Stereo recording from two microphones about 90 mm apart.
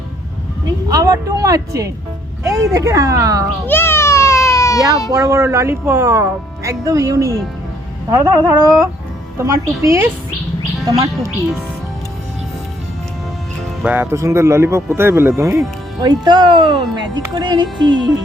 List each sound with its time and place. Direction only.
0.9 s speech: 40° right (ahead or behind)
3.7 s baby cry: 25° left (ahead or behind)
5.1 s speech: 35° right (ahead or behind)
13.8 s speech: 20° right (ahead or behind)
14.2 s speech: 35° right (ahead or behind)
16.0 s speech: 50° right (ahead or behind)